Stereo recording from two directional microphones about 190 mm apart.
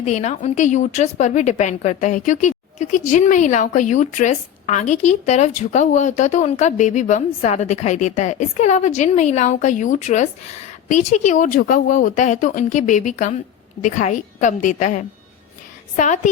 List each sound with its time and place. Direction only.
0.0 s a woman's voice: 35° left (ahead or behind)